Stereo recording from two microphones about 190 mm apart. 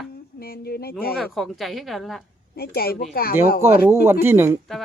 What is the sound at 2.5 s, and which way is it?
Speech, 55° left (ahead or behind).